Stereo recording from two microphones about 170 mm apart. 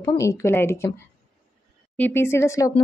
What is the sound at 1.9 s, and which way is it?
Speech, 10° left (ahead or behind).